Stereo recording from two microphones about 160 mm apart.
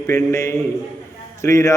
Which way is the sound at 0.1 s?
15° left (ahead or behind).